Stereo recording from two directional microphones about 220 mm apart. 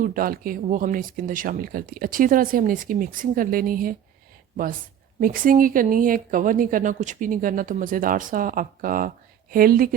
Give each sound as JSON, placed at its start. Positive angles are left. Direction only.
{"t": 0.0, "sound": "speech", "side_deg": -40}
{"t": 5.2, "sound": "speech", "side_deg": -40}